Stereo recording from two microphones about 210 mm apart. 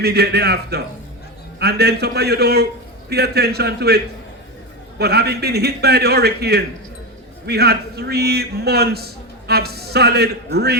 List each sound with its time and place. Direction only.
0.0 s a man's voice: 50° right (ahead or behind)